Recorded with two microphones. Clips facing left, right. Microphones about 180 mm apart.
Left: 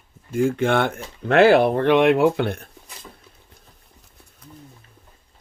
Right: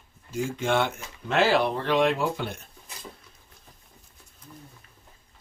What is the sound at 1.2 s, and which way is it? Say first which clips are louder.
Speech: left 8 dB; 60° left (ahead or behind).